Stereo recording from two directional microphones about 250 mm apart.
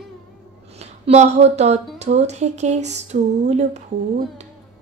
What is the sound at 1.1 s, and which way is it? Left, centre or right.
Speech, right.